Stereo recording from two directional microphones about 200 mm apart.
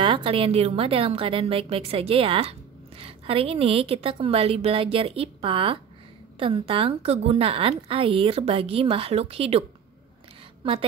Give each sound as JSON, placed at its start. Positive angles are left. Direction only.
{"t": 0.0, "sound": "a woman's voice", "side_deg": -25}